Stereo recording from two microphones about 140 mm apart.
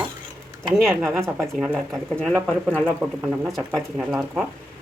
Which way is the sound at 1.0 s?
20° right (ahead or behind).